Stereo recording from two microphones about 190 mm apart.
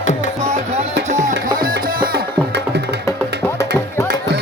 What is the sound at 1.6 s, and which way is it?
Music, 50° right (ahead or behind).